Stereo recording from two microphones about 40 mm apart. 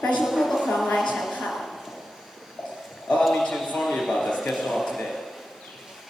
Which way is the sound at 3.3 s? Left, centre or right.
Centre.